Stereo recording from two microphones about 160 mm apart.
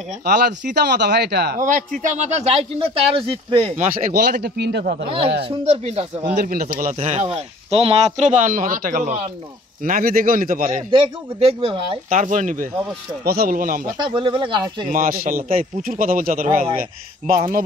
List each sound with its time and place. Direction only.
0.2 s speech: 90° right
1.6 s speech: 55° right (ahead or behind); by 3.7 s 35° right (ahead or behind)
3.7 s speech: 50° right (ahead or behind)
4.1 s speech: 85° right
5.0 s speech: 35° right (ahead or behind)
6.3 s speech: 60° right (ahead or behind)
7.0 s speech: 40° right (ahead or behind)
9.8 s speech: 65° right (ahead or behind)
10.9 s speech: 35° right (ahead or behind)
12.1 s speech: 50° right (ahead or behind)
13.2 s speech: 75° right (ahead or behind)
14.0 s speech: 30° right (ahead or behind)
14.9 s speech: 60° right (ahead or behind)